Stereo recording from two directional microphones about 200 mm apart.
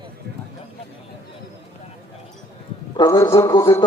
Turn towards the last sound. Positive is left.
turn(degrees=20)  # may be behind; listen again after turning